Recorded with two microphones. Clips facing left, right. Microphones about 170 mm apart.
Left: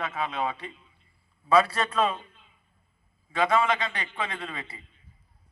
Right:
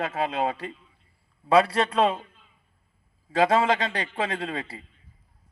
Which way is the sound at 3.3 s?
35° right (ahead or behind).